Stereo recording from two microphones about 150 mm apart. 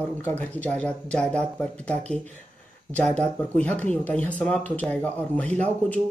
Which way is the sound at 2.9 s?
5° left (ahead or behind).